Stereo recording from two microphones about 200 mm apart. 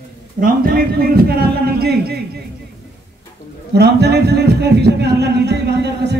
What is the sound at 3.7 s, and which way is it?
Speech, 55° right (ahead or behind).